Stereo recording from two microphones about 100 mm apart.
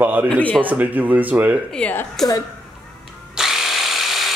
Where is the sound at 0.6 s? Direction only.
15° right (ahead or behind).